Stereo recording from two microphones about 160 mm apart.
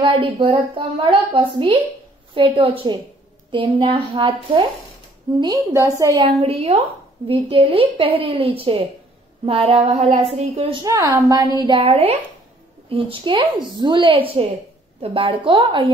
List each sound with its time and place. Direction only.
0.0 s a woman's voice: 30° right (ahead or behind)
6.2 s a woman's voice: 35° right (ahead or behind)
10.9 s a woman's voice: 20° right (ahead or behind)
11.6 s a woman's voice: 35° right (ahead or behind)